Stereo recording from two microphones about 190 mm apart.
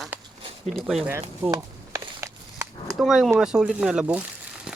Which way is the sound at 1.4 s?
15° right (ahead or behind).